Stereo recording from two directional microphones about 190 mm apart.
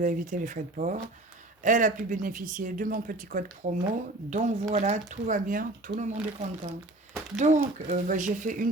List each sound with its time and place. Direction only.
0.0 s speech: 45° right (ahead or behind)